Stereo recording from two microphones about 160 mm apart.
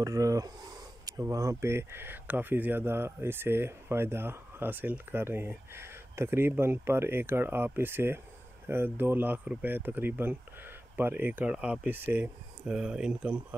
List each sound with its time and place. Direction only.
0.0 s speech: 20° right (ahead or behind)